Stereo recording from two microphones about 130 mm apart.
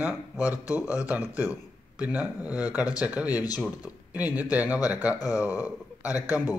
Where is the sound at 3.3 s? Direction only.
30° left (ahead or behind).